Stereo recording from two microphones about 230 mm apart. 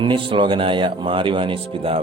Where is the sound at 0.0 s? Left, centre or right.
Right.